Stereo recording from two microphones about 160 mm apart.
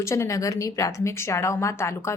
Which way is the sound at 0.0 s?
20° left (ahead or behind).